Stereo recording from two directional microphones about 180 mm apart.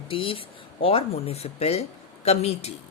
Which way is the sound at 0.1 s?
30° left (ahead or behind).